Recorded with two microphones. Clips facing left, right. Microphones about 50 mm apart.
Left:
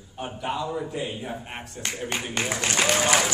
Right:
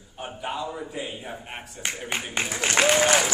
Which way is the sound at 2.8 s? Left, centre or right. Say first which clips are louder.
Right 3 dB; centre.